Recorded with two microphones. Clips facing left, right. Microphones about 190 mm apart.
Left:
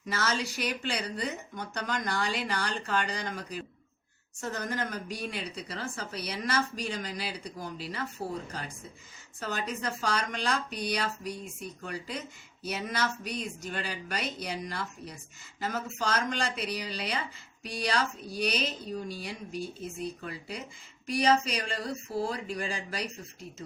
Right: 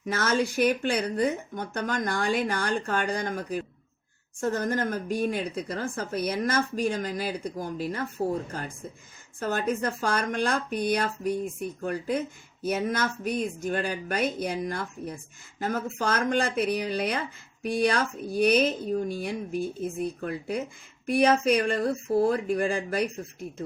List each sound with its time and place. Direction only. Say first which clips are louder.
0.1 s speech: right 6 dB; 55° right (ahead or behind)